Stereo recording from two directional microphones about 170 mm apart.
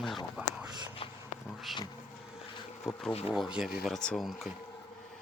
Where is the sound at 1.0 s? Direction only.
30° left (ahead or behind).